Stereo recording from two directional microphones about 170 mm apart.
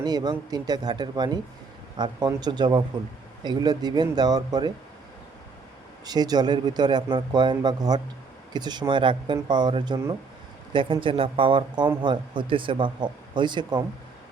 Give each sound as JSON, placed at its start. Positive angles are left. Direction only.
{"t": 0.0, "sound": "speech", "side_deg": -25}
{"t": 6.1, "sound": "speech", "side_deg": -25}